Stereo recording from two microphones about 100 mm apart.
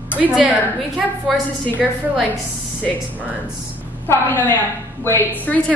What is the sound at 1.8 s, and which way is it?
Speech, centre (ahead or behind).